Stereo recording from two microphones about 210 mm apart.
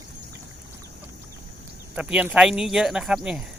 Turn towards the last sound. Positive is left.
turn(degrees=-5)  # may be behind; listen again after turning